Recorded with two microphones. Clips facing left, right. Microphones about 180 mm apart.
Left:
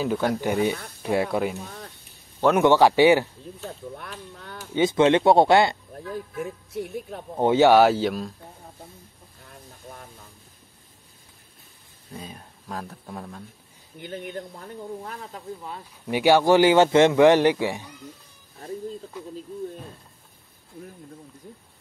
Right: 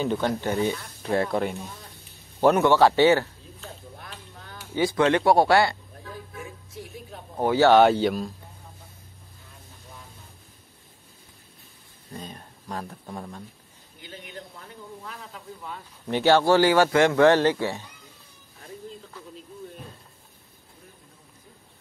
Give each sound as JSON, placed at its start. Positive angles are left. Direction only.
{"t": 0.0, "sound": "speech", "side_deg": 5}
{"t": 4.0, "sound": "a sound", "side_deg": 60}
{"t": 4.7, "sound": "speech", "side_deg": 20}
{"t": 6.7, "sound": "speech", "side_deg": 60}
{"t": 7.3, "sound": "speech", "side_deg": 20}
{"t": 7.7, "sound": "speech", "side_deg": 5}
{"t": 9.5, "sound": "vehicle", "side_deg": 55}
{"t": 12.1, "sound": "speech", "side_deg": 5}
{"t": 14.0, "sound": "speech", "side_deg": 50}
{"t": 16.1, "sound": "speech", "side_deg": 10}